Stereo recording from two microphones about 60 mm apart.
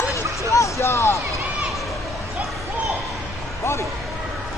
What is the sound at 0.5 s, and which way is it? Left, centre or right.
Speech, left.